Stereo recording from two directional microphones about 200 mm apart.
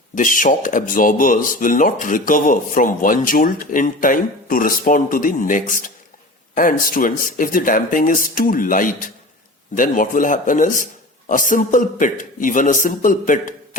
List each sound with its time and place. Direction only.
0.1 s a man's voice: 40° left (ahead or behind)